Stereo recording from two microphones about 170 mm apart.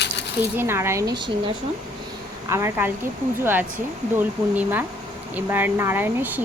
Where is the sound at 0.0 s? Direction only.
80° left.